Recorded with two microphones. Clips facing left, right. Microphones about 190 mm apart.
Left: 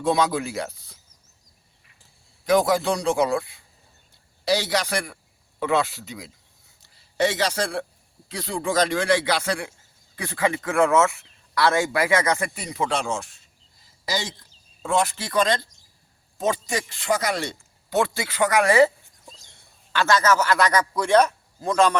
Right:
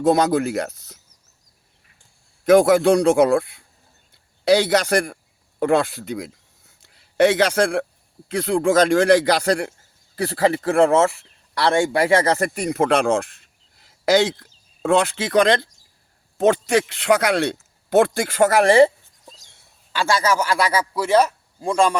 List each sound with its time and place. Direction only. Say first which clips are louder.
0.0 s a man's voice: right 5 dB; 45° right (ahead or behind)
2.4 s a man's voice: right 7 dB; 55° right (ahead or behind); by 12.5 s 30° right (ahead or behind)
12.5 s speech: right 8 dB; 55° right (ahead or behind); by 18.9 s 30° right (ahead or behind)
19.3 s a man's voice: right 1 dB; 5° right (ahead or behind)